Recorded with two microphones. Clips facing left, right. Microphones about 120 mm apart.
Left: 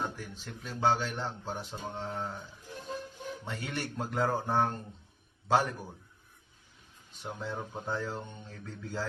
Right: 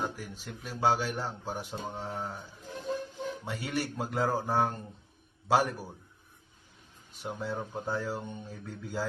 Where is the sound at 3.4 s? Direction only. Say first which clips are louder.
Right 3 dB; 10° right (ahead or behind).